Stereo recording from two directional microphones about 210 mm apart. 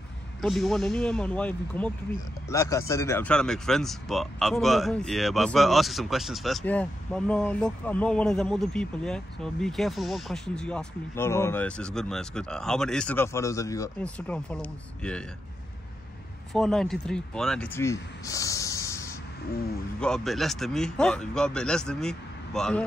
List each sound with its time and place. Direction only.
0.4 s a man's voice: centre (ahead or behind)
16.5 s speech: centre (ahead or behind)
18.2 s a sound: 15° left (ahead or behind)
20.0 s speech: centre (ahead or behind)